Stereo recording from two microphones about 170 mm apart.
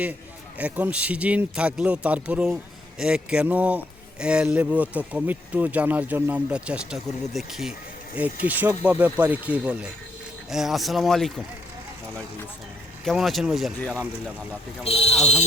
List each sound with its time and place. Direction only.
0.6 s a man's voice: 10° right (ahead or behind)
13.1 s speech: centre (ahead or behind)
14.8 s speech: 35° left (ahead or behind)
15.1 s speech: 5° left (ahead or behind)